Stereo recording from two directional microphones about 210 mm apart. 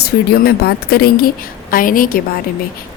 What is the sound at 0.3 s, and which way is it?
A woman's voice, 45° left (ahead or behind).